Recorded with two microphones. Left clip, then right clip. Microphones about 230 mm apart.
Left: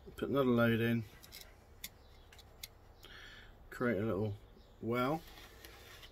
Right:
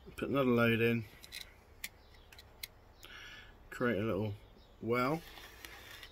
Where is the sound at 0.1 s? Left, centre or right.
Centre.